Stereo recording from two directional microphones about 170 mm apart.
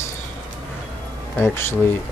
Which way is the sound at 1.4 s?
15° left (ahead or behind).